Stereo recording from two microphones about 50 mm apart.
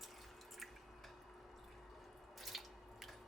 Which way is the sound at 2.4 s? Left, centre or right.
Centre.